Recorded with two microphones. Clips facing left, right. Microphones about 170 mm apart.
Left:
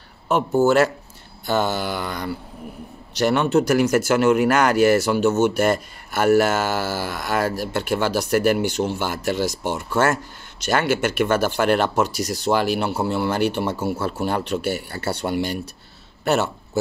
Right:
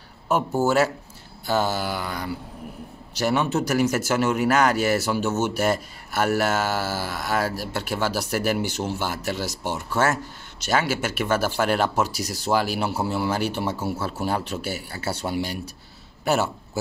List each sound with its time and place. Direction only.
0.3 s speech: 5° right (ahead or behind)
14.6 s speech: 60° left (ahead or behind)
14.9 s a man's voice: 5° right (ahead or behind)